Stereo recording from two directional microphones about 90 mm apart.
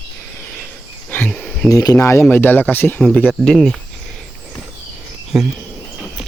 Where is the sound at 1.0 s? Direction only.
20° left (ahead or behind).